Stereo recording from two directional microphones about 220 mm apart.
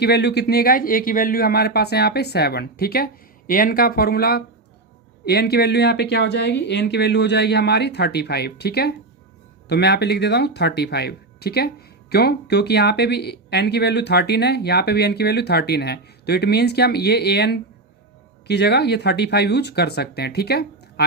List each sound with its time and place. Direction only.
0.0 s speech: 50° left (ahead or behind)